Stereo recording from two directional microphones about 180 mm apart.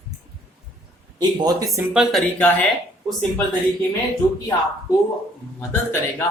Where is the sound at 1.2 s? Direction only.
20° right (ahead or behind).